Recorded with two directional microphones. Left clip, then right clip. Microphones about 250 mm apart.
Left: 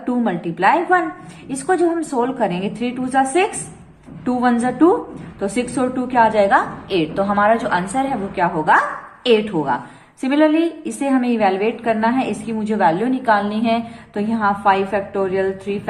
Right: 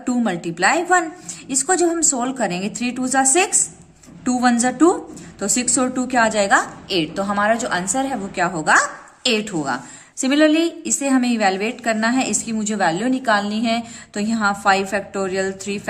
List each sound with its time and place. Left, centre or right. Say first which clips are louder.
0.0 s a woman's voice: left 1 dB; right